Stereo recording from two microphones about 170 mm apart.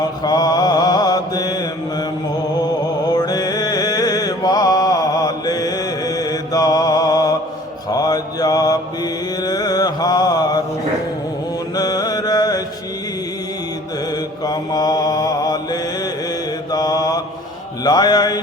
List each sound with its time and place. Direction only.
0.2 s mantra: 25° left (ahead or behind)
3.1 s mantra: 20° left (ahead or behind)
11.7 s mantra: 20° left (ahead or behind)
14.1 s mantra: 25° left (ahead or behind)